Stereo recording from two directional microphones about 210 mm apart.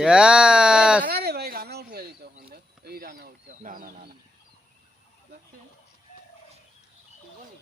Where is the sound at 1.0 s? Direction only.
50° right (ahead or behind).